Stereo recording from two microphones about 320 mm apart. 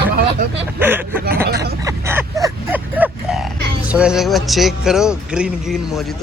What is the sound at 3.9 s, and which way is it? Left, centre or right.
Speech, centre.